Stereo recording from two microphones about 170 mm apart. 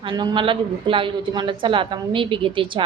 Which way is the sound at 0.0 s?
25° right (ahead or behind).